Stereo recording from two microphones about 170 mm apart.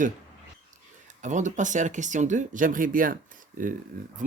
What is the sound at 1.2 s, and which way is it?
Speech, 45° right (ahead or behind).